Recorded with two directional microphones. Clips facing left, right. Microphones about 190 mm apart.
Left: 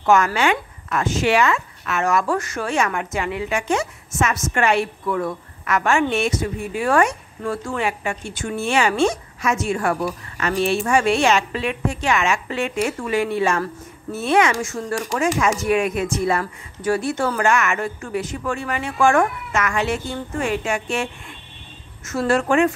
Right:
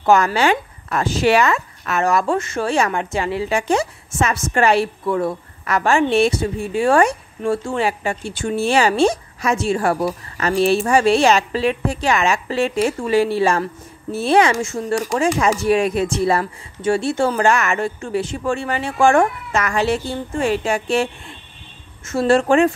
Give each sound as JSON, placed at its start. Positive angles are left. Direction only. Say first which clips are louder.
{"t": 0.0, "sound": "a woman's voice", "louder": "right 2 dB", "side_deg": -35}